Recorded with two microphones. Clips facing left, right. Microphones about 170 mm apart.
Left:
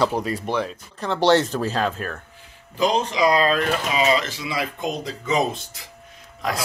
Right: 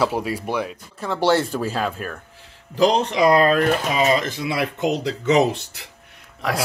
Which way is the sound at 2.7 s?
70° right (ahead or behind).